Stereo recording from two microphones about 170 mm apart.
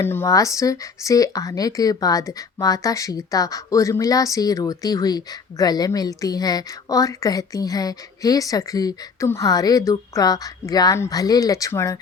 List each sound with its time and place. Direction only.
0.0 s speech: 15° left (ahead or behind)